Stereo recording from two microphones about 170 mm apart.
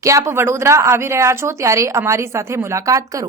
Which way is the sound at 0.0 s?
20° right (ahead or behind).